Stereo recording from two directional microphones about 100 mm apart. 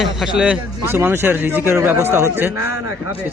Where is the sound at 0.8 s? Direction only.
25° right (ahead or behind).